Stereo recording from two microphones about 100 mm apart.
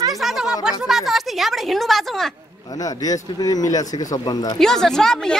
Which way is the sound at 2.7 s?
40° left (ahead or behind).